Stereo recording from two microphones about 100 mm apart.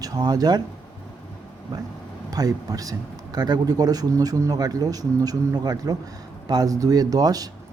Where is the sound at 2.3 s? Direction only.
40° right (ahead or behind).